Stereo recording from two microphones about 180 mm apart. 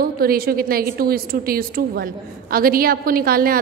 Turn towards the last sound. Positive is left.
turn(degrees=-55)  # may be behind; listen again after turning